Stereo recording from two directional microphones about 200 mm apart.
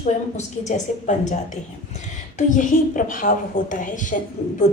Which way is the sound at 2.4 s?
40° left (ahead or behind).